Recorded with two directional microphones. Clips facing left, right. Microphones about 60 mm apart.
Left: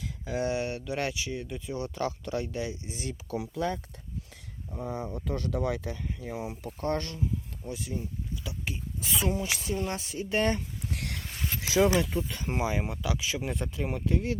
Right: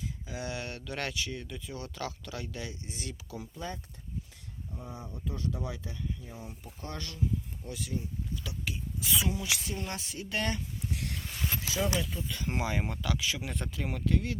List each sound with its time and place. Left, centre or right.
0.4 s speech: left
3.2 s speech: left
4.7 s speech: left
7.6 s speech: left
10.9 s a sound: left
11.6 s speech: left
12.5 s speech: centre
13.1 s speech: left